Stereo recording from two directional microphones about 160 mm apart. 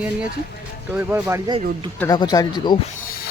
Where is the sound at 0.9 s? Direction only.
15° right (ahead or behind).